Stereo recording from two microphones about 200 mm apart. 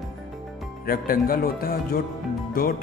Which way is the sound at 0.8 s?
45° left (ahead or behind).